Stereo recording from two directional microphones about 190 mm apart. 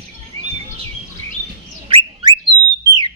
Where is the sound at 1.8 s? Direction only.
30° right (ahead or behind).